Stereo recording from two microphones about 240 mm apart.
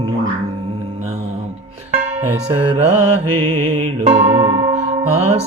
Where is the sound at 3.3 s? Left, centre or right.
Right.